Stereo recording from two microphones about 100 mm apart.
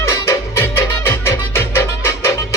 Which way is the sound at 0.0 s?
30° left (ahead or behind).